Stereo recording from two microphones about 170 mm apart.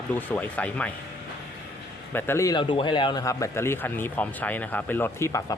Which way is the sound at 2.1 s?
15° left (ahead or behind).